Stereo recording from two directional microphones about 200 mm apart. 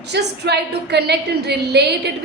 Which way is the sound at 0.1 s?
55° right (ahead or behind).